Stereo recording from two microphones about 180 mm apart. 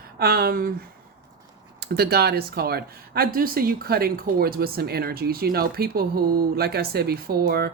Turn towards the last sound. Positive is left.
turn(degrees=-55)  # may be behind; listen again after turning